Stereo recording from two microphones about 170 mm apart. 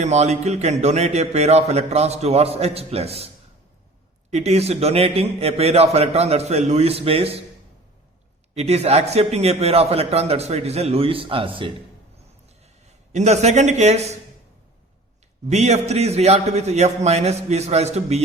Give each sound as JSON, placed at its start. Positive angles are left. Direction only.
{"t": 0.0, "sound": "a man's voice", "side_deg": -40}
{"t": 4.3, "sound": "a man's voice", "side_deg": -40}
{"t": 8.5, "sound": "a man's voice", "side_deg": -40}
{"t": 13.1, "sound": "a man's voice", "side_deg": -40}
{"t": 15.4, "sound": "a man's voice", "side_deg": -40}